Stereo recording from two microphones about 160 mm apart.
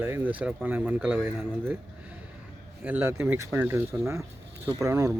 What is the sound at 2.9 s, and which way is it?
Speech, 15° right (ahead or behind).